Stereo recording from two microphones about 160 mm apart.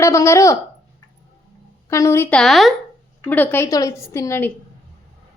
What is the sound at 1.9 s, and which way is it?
Speech, 20° left (ahead or behind).